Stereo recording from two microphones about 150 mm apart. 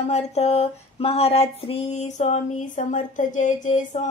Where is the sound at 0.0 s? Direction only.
45° left (ahead or behind).